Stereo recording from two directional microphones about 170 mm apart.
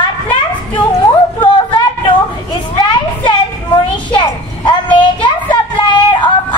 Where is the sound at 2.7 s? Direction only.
25° left (ahead or behind).